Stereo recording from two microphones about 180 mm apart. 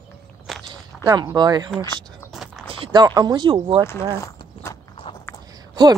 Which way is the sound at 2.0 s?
Centre (ahead or behind).